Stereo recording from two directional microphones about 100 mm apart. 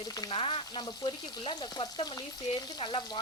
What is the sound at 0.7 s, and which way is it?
Speech, 45° left (ahead or behind).